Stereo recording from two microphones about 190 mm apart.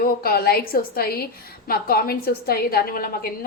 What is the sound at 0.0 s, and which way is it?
A woman's voice, 50° left (ahead or behind).